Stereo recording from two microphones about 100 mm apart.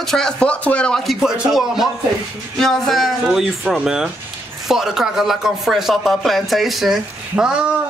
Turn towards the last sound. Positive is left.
turn(degrees=-10)  # may be behind; listen again after turning